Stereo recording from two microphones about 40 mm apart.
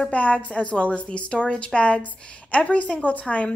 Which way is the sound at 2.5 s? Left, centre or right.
Left.